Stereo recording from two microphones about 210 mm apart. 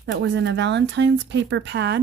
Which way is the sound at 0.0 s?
60° right (ahead or behind).